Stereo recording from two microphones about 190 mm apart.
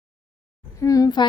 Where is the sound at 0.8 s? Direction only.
15° left (ahead or behind).